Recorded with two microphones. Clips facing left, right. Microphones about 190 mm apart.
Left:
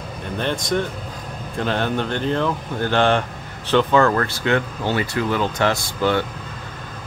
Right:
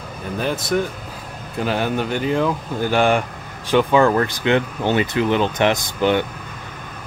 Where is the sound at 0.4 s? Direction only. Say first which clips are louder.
Right 1 dB; 5° right (ahead or behind).